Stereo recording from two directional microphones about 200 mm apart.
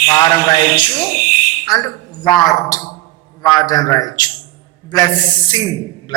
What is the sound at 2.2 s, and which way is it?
A man's voice, 20° left (ahead or behind).